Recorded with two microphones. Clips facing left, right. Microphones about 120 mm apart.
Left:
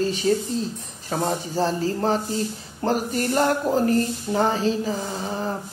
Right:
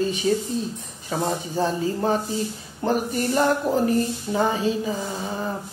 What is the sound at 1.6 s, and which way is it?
Speech, 15° right (ahead or behind).